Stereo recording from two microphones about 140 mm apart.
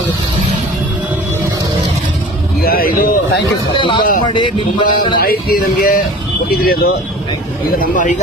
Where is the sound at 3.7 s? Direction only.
35° left (ahead or behind).